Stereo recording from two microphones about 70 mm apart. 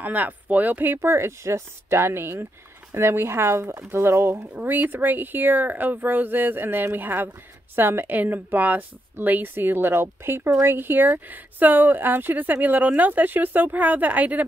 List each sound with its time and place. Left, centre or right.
0.0 s speech: right
0.9 s a woman's voice: right